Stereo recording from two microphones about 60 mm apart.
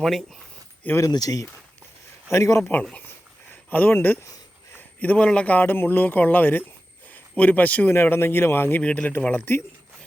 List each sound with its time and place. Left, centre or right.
0.0 s speech: centre
0.9 s speech: left
2.3 s a man's voice: left
3.5 s a man's voice: left
7.9 s a man's voice: left
8.8 s a man's voice: left
9.3 s a man's voice: left